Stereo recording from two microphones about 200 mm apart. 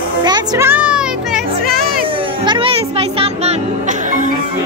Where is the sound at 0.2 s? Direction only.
20° right (ahead or behind); by 1.4 s 5° right (ahead or behind).